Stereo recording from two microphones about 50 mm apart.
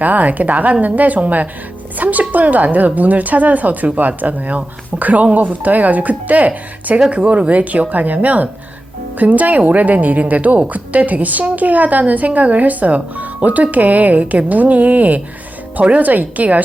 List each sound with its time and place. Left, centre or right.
0.0 s a woman's voice: right